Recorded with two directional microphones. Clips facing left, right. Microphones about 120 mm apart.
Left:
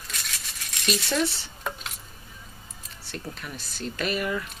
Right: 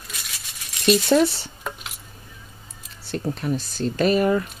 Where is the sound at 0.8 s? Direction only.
40° right (ahead or behind).